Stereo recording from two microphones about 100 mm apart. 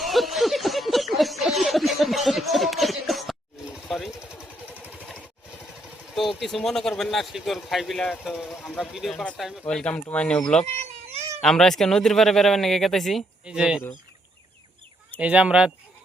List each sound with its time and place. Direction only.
0.0 s a sound: centre (ahead or behind)
3.8 s vehicle: centre (ahead or behind)
6.1 s a man's voice: 5° left (ahead or behind)
8.4 s speech: 10° left (ahead or behind)
8.8 s a man's voice: centre (ahead or behind)
9.6 s speech: 10° left (ahead or behind)
10.7 s cat: 90° right
11.4 s a man's voice: 5° left (ahead or behind)
13.4 s speech: 10° right (ahead or behind)
15.2 s speech: 10° right (ahead or behind)